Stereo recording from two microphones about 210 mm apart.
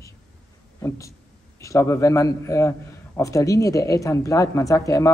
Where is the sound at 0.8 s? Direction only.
15° left (ahead or behind).